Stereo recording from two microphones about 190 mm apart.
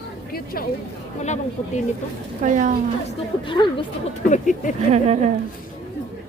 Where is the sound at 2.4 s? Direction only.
45° right (ahead or behind).